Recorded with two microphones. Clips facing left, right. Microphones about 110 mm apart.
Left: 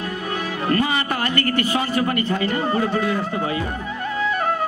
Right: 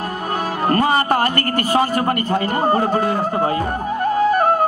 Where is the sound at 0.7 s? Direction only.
45° right (ahead or behind).